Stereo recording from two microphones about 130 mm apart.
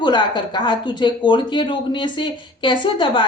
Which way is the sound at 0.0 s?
35° left (ahead or behind).